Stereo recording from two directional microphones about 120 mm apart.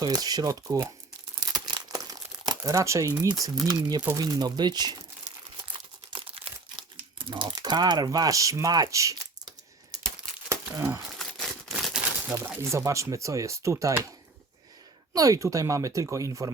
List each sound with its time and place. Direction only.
0.0 s speech: 30° right (ahead or behind)
1.4 s crumpling: 35° right (ahead or behind)
4.2 s speech: 35° right (ahead or behind)
6.1 s crumpling: 50° right (ahead or behind); by 9.2 s 25° right (ahead or behind)
10.5 s crumpling: 25° right (ahead or behind)
11.2 s crumpling: centre (ahead or behind)
12.6 s speech: 25° right (ahead or behind)
15.1 s speech: 30° right (ahead or behind)